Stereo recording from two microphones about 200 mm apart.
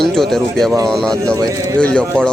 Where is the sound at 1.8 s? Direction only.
5° left (ahead or behind).